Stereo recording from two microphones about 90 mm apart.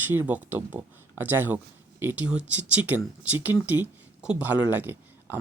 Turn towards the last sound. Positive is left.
turn(degrees=-25)  # may be behind; listen again after turning